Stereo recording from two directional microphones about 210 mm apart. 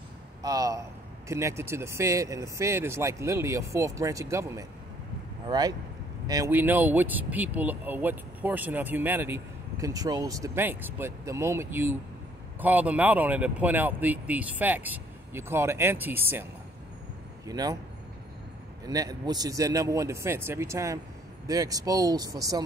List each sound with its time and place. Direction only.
0.4 s a sound: 20° right (ahead or behind)
1.3 s speech: 15° right (ahead or behind)
17.5 s speech: 20° right (ahead or behind)
18.9 s speech: 20° right (ahead or behind)